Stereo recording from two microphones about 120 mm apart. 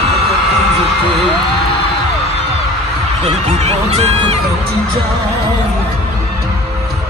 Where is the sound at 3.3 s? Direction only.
65° right (ahead or behind).